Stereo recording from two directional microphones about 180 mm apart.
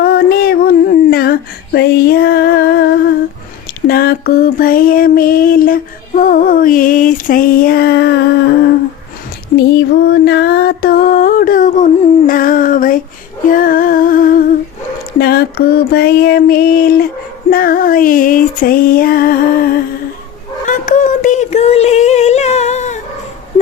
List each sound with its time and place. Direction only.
0.0 s female singing: 60° left (ahead or behind)
9.6 s music: 65° left (ahead or behind)
15.2 s mantra: 60° left (ahead or behind)
17.5 s female singing: 55° left (ahead or behind)
20.7 s a sound: 45° left (ahead or behind)